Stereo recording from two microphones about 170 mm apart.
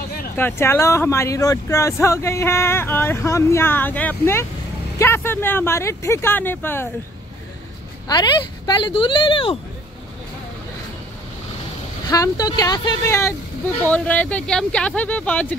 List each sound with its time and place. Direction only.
0.4 s speech: 15° left (ahead or behind)
8.1 s speech: 25° left (ahead or behind)
12.1 s speech: 20° left (ahead or behind)
13.8 s speech: 10° left (ahead or behind)